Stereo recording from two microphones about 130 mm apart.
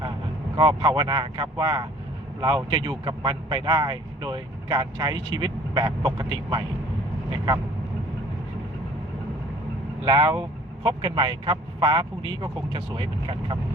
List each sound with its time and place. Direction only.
0.5 s speech: 35° right (ahead or behind)
10.1 s speech: 35° right (ahead or behind)